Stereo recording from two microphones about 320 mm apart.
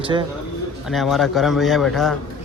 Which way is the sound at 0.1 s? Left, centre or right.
Centre.